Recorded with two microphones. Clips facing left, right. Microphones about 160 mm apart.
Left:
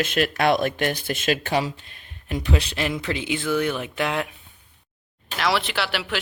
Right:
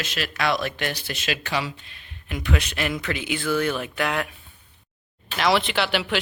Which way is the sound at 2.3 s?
35° left (ahead or behind).